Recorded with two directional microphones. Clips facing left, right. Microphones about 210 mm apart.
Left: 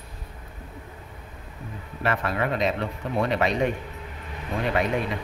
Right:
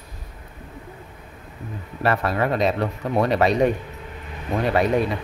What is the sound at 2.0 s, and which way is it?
Speech, 35° right (ahead or behind).